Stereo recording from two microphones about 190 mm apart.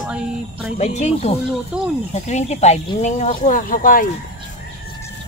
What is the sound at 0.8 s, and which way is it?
Speech, 35° left (ahead or behind).